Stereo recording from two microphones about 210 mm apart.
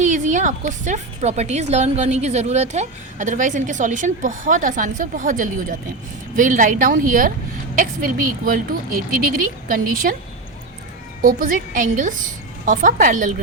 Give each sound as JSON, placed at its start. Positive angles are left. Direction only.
{"t": 0.0, "sound": "a woman's voice", "side_deg": -35}
{"t": 9.6, "sound": "a woman's voice", "side_deg": -40}
{"t": 11.2, "sound": "a woman's voice", "side_deg": -40}